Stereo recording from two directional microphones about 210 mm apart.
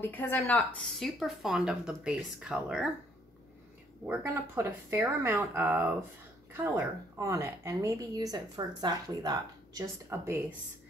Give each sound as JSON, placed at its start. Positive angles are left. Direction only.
{"t": 0.0, "sound": "speech", "side_deg": 10}
{"t": 4.1, "sound": "a woman's voice", "side_deg": -10}